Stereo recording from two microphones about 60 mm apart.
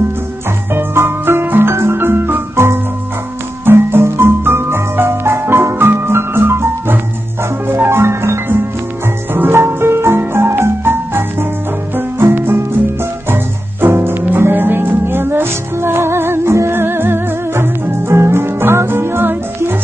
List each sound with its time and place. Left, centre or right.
0.7 s music: right